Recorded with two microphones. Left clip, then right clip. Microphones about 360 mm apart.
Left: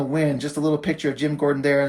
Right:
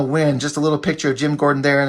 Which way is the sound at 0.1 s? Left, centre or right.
Right.